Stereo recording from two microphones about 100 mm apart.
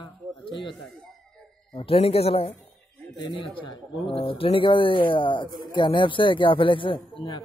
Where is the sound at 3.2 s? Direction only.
55° left (ahead or behind).